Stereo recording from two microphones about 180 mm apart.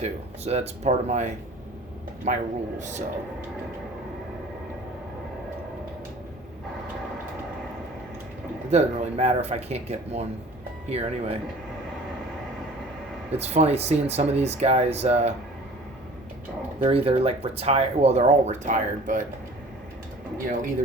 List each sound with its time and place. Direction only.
0.0 s a man's voice: 35° right (ahead or behind)
8.7 s speech: 35° right (ahead or behind)
13.3 s speech: 35° right (ahead or behind)
16.8 s speech: 30° right (ahead or behind)